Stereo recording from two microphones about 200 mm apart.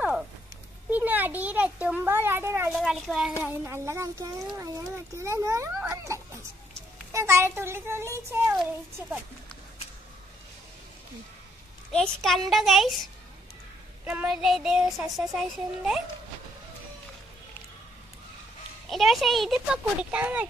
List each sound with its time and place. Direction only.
0.8 s a sound: 10° right (ahead or behind)
2.7 s a child's voice: centre (ahead or behind)
3.4 s a child's voice: 15° right (ahead or behind)
11.9 s a child's voice: 5° left (ahead or behind)
14.0 s a child's voice: 5° right (ahead or behind)
18.9 s a child's voice: centre (ahead or behind)